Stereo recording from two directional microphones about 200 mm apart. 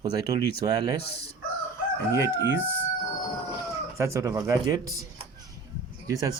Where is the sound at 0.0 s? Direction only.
20° right (ahead or behind).